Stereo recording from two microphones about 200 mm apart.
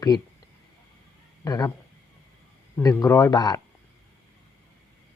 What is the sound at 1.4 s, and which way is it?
Speech, 15° left (ahead or behind).